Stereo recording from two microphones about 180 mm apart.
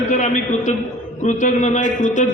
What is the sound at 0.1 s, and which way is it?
A man's voice, 40° left (ahead or behind).